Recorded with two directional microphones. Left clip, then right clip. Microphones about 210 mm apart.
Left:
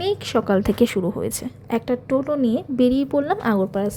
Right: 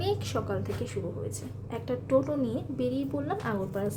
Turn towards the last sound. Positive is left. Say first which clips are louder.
# left 10 dB
turn(degrees=35)  # may be behind; listen again after turning